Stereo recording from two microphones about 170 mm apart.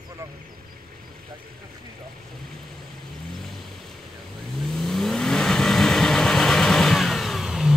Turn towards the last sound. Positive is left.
turn(degrees=0)  # may be behind; listen again after turning